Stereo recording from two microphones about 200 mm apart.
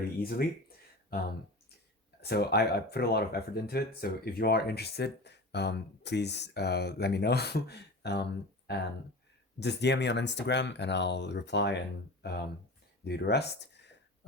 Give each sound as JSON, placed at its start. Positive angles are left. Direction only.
{"t": 0.2, "sound": "speech", "side_deg": 50}
{"t": 2.2, "sound": "speech", "side_deg": 55}